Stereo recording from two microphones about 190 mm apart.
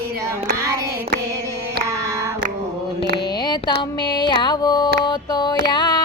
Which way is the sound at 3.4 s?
20° left (ahead or behind).